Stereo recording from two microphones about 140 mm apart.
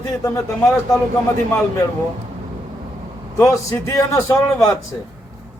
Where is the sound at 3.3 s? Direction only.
25° left (ahead or behind).